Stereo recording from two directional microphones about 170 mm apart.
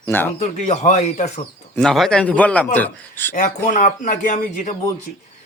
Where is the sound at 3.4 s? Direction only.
50° left (ahead or behind).